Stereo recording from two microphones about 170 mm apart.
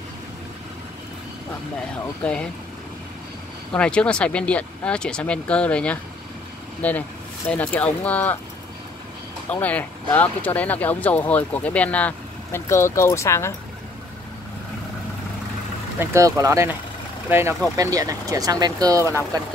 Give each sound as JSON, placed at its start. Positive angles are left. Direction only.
{"t": 2.2, "sound": "speech", "side_deg": 5}
{"t": 3.7, "sound": "speech", "side_deg": 5}
{"t": 9.5, "sound": "speech", "side_deg": 10}
{"t": 16.0, "sound": "speech", "side_deg": -15}